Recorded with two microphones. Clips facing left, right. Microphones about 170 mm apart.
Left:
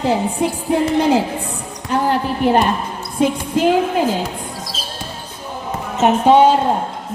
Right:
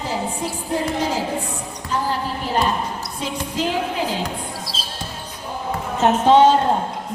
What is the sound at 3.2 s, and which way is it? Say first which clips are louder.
Music: left 10 dB; 55° left (ahead or behind).